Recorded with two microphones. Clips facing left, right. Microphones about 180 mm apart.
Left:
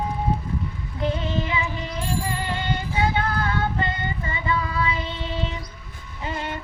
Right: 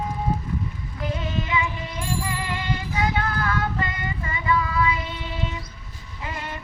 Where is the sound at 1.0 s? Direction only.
30° left (ahead or behind).